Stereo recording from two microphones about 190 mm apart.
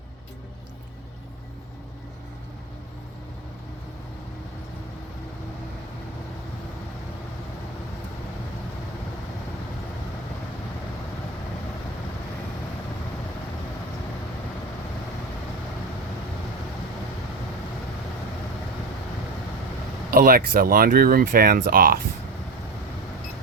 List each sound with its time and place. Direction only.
20.1 s speech: 50° right (ahead or behind)